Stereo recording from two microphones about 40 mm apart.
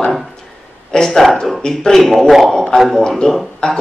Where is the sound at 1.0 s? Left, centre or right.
Centre.